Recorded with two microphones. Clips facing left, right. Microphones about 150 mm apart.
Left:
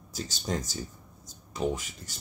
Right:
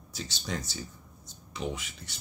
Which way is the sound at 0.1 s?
40° left (ahead or behind).